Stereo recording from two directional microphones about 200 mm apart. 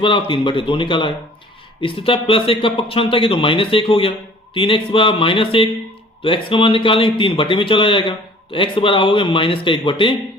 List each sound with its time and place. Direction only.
0.0 s a man's voice: 25° left (ahead or behind)